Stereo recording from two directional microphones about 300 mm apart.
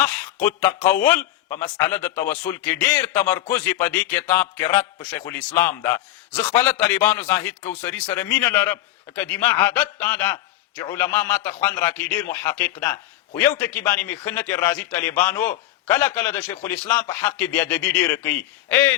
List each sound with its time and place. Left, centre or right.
0.0 s a man's voice: centre